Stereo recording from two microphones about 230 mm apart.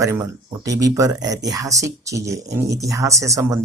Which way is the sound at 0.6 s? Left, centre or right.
Centre.